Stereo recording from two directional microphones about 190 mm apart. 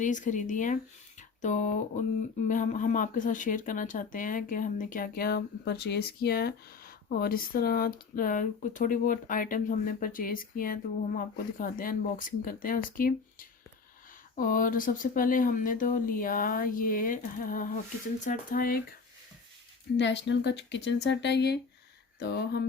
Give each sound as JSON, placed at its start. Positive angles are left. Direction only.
{"t": 0.0, "sound": "speech", "side_deg": 40}
{"t": 20.0, "sound": "speech", "side_deg": 70}